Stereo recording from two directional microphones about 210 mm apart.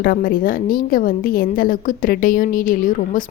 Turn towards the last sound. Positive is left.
turn(degrees=40)  # may be behind; listen again after turning